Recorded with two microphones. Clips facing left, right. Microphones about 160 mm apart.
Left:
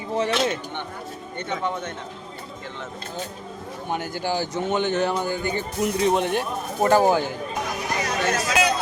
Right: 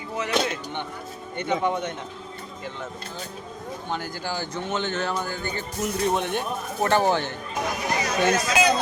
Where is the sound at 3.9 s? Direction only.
15° left (ahead or behind).